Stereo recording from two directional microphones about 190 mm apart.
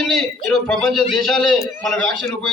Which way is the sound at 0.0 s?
Centre (ahead or behind).